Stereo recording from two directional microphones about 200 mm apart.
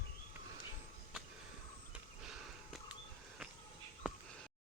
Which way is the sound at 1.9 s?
Centre (ahead or behind).